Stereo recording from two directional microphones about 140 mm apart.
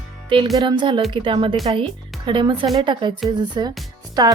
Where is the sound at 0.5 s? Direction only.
30° right (ahead or behind).